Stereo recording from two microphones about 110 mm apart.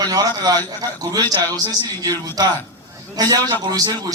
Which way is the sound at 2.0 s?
35° right (ahead or behind).